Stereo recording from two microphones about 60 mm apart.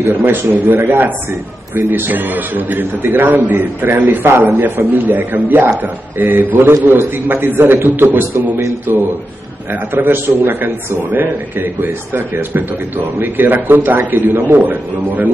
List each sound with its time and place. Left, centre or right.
0.1 s a man's voice: right